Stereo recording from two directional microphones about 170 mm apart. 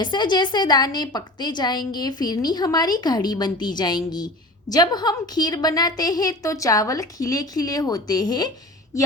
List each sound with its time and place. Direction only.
0.0 s a woman's voice: 25° left (ahead or behind)